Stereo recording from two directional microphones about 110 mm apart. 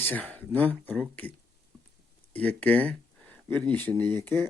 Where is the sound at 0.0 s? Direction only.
15° left (ahead or behind).